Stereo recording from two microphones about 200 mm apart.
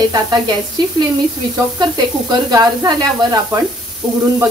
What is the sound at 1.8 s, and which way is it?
Speech, 20° right (ahead or behind).